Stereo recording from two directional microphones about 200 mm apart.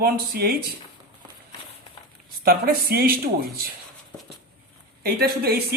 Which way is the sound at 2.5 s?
50° right (ahead or behind).